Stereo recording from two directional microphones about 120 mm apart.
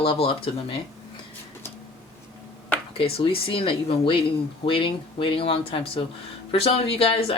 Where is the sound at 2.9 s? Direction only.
50° left (ahead or behind).